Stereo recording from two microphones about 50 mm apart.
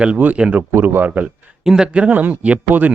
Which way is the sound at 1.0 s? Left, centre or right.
Right.